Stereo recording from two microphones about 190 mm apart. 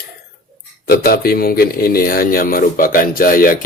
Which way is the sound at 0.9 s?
50° left (ahead or behind).